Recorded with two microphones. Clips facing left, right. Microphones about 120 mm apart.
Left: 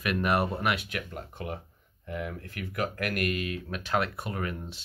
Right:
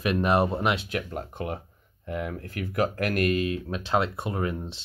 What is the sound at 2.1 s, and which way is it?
Speech, 60° right (ahead or behind).